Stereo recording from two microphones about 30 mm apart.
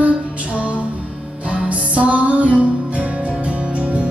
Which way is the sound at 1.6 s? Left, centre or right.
Right.